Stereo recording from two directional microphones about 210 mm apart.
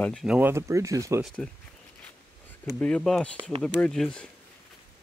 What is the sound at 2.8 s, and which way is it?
Speech, 5° left (ahead or behind).